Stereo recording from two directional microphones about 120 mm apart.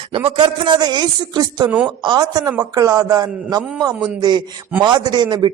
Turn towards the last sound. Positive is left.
turn(degrees=-35)  # may be behind; listen again after turning